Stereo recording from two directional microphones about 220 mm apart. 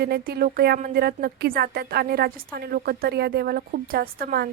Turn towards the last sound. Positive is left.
turn(degrees=-45)  # may be behind; listen again after turning